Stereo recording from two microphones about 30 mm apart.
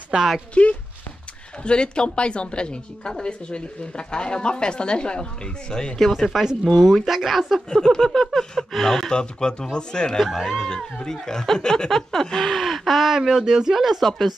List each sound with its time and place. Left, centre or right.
0.1 s speech: right
0.6 s a woman's voice: left
5.9 s speech: centre
7.7 s a sound: centre
8.7 s speech: centre
9.1 s speech: left
10.1 s speech: centre
10.6 s speech: centre
11.1 s a sound: centre
12.6 s speech: centre
14.0 s speech: centre